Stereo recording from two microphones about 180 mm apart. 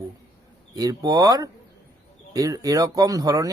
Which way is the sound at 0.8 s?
20° right (ahead or behind).